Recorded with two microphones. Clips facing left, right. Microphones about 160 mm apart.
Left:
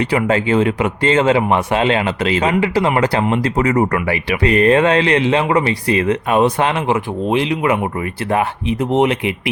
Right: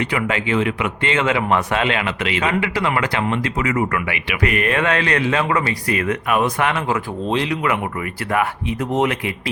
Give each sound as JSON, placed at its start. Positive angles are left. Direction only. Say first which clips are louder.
{"t": 0.0, "sound": "speech", "louder": "left 5 dB", "side_deg": 30}